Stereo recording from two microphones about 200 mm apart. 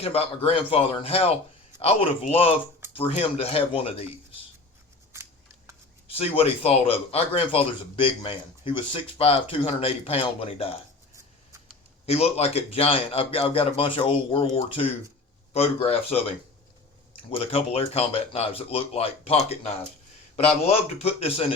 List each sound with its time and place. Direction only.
0.0 s a man's voice: 30° left (ahead or behind)
6.1 s a man's voice: 30° left (ahead or behind)
12.0 s a man's voice: 30° left (ahead or behind)